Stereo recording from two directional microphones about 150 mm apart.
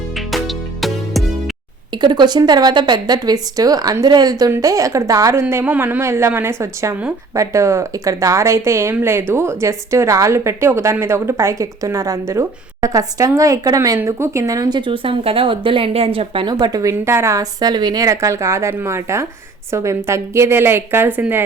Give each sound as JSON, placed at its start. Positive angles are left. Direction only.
{"t": 0.3, "sound": "music", "side_deg": 0}
{"t": 2.0, "sound": "a woman's voice", "side_deg": -30}